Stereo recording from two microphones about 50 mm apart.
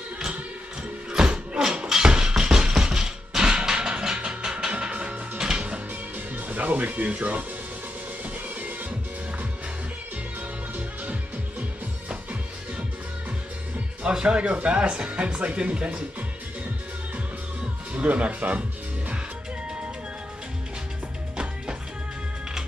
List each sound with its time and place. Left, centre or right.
1.1 s music: centre
6.1 s music: right
12.1 s music: right
14.0 s speech: centre
17.9 s speech: right